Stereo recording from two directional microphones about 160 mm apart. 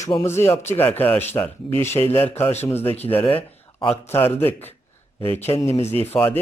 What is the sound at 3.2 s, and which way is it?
Speech, 35° left (ahead or behind).